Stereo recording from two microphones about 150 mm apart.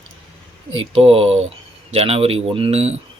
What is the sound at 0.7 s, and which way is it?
A man's voice, 40° right (ahead or behind).